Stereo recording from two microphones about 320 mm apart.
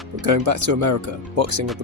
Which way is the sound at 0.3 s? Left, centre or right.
Right.